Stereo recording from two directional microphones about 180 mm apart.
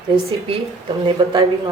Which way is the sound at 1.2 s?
25° right (ahead or behind).